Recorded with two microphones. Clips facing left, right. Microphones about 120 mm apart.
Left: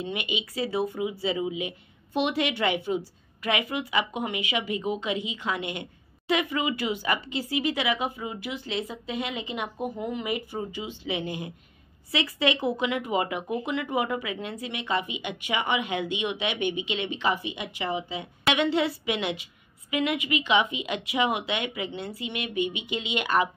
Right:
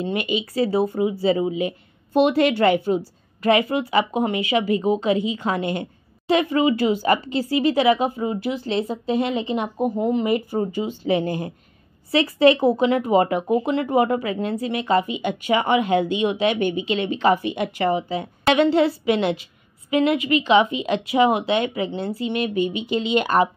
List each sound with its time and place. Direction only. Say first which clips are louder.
0.0 s speech: right 8 dB; 40° right (ahead or behind)